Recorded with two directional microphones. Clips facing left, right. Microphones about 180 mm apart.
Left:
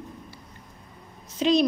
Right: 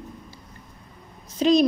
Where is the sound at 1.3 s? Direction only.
45° right (ahead or behind).